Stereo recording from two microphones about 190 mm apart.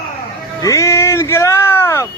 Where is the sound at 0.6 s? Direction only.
15° left (ahead or behind).